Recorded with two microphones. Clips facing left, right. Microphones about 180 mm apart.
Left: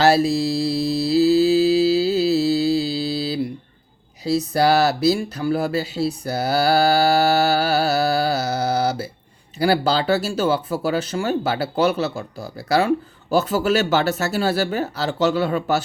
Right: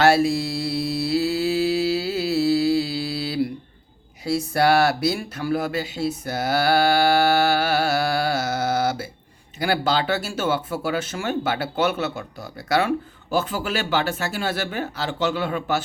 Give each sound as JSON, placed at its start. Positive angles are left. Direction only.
{"t": 0.0, "sound": "mantra", "side_deg": 25}
{"t": 4.5, "sound": "speech", "side_deg": 25}
{"t": 13.3, "sound": "speech", "side_deg": 40}